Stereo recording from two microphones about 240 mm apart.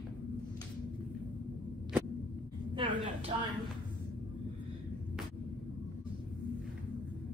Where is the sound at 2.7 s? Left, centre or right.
Right.